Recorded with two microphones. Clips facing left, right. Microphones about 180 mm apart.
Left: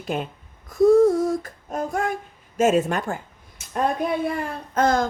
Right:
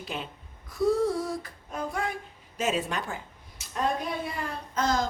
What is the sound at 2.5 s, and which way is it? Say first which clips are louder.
A woman's voice: left 9 dB; 50° left (ahead or behind).